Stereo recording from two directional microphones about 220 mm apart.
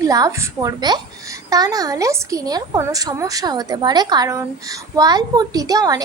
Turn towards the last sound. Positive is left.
turn(degrees=-15)  # may be behind; listen again after turning